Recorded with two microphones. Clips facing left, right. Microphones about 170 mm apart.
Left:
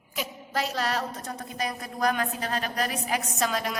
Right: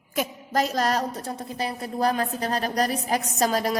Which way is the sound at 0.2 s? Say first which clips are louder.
Right 6 dB; 45° right (ahead or behind).